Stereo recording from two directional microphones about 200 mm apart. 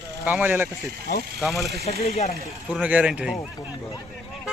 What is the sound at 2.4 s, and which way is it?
Speech, 5° right (ahead or behind).